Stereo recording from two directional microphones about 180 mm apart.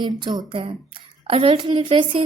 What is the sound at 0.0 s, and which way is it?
A woman's voice, 25° right (ahead or behind).